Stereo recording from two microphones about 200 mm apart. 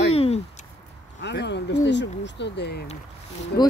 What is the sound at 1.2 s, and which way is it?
Speech, 60° left (ahead or behind).